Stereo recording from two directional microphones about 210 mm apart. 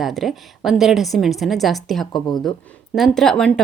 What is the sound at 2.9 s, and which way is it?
Speech, centre (ahead or behind).